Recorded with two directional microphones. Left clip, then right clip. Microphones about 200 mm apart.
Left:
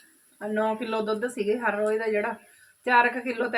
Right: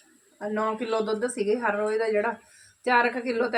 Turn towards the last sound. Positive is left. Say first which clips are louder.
# right 1 dB
turn(degrees=-15)  # may be behind; listen again after turning